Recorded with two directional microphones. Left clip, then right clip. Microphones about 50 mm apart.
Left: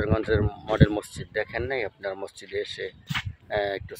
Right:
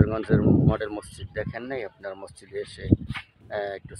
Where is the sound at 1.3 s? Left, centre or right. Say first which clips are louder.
Left 4 dB; left.